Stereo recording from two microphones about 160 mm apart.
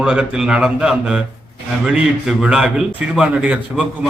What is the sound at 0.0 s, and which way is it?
A man's voice, 5° right (ahead or behind).